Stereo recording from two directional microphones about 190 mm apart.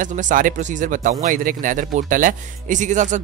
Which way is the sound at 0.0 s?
40° right (ahead or behind).